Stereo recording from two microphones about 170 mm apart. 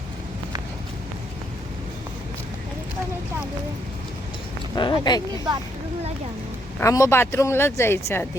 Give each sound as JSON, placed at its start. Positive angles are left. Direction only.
{"t": 4.7, "sound": "speech", "side_deg": 25}
{"t": 6.7, "sound": "speech", "side_deg": 20}